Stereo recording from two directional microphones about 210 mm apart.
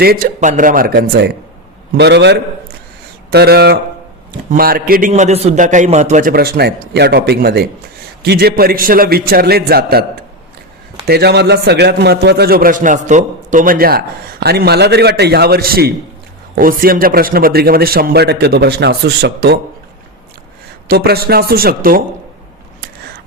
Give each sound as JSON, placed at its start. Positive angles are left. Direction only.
{"t": 0.0, "sound": "a man's voice", "side_deg": -45}
{"t": 0.3, "sound": "a man's voice", "side_deg": -35}
{"t": 20.8, "sound": "a man's voice", "side_deg": -50}